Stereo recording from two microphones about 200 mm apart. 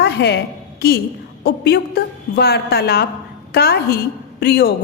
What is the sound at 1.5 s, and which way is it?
A woman's voice, 55° left (ahead or behind).